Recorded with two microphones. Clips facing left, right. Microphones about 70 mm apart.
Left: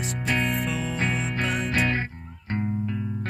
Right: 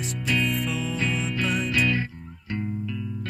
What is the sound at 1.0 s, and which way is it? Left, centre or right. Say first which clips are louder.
Music: even; left.